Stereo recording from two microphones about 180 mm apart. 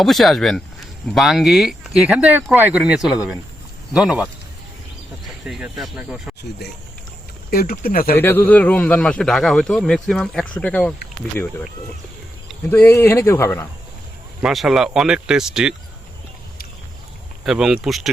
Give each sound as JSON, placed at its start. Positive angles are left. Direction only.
{"t": 0.0, "sound": "speech", "side_deg": 0}
{"t": 5.5, "sound": "speech", "side_deg": -5}
{"t": 6.6, "sound": "speech", "side_deg": 65}
{"t": 7.5, "sound": "speech", "side_deg": 55}
{"t": 8.2, "sound": "speech", "side_deg": 10}
{"t": 12.7, "sound": "speech", "side_deg": 15}
{"t": 14.4, "sound": "speech", "side_deg": 0}
{"t": 17.4, "sound": "speech", "side_deg": 0}